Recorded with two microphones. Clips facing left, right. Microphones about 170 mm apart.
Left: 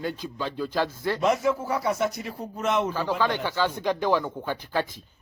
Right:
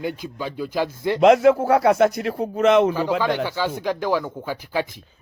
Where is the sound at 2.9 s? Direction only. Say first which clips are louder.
Right 4 dB; 15° right (ahead or behind).